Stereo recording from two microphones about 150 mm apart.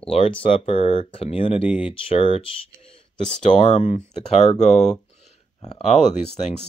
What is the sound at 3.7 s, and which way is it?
Speech, 50° left (ahead or behind).